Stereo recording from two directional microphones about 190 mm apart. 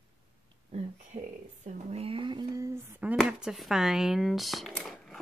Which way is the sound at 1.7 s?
35° right (ahead or behind).